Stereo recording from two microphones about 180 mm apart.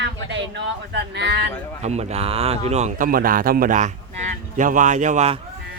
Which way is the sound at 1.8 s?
35° right (ahead or behind).